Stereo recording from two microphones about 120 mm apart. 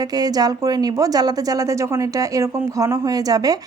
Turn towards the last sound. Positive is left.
turn(degrees=-30)  # may be behind; listen again after turning